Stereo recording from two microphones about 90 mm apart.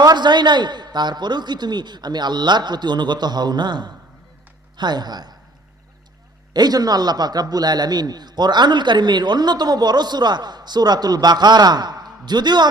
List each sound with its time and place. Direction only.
0.0 s a man's voice: 55° right (ahead or behind)
6.5 s a man's voice: 50° right (ahead or behind)